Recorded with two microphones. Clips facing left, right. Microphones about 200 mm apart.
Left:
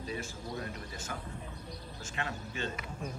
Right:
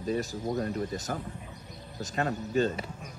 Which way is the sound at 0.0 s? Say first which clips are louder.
Right 9 dB; 45° right (ahead or behind).